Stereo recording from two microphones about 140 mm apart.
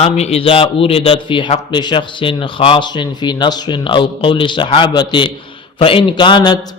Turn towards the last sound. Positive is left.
turn(degrees=35)  # may be behind; listen again after turning